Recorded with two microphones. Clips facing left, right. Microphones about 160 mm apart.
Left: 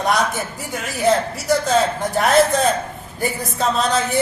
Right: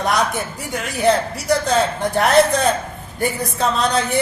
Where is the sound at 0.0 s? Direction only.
Centre (ahead or behind).